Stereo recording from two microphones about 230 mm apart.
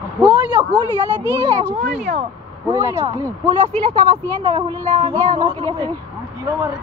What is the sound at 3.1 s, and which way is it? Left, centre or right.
Speech, centre.